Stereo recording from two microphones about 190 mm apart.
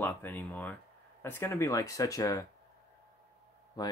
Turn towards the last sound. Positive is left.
turn(degrees=20)  # may be behind; listen again after turning